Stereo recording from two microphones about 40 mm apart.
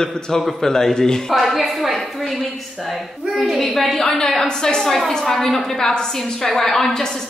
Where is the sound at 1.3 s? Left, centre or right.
Centre.